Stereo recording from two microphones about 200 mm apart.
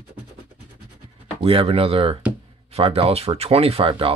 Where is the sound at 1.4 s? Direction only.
30° right (ahead or behind).